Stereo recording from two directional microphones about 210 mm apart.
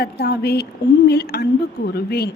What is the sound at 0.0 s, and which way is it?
A woman's voice, 50° left (ahead or behind).